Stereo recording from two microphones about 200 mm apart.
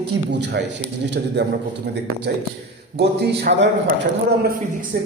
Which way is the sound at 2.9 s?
55° right (ahead or behind).